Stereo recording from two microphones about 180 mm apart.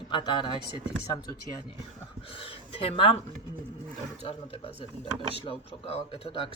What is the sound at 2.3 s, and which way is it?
Speech, 30° left (ahead or behind).